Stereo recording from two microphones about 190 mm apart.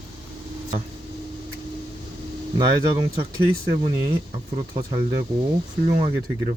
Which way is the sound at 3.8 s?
25° right (ahead or behind).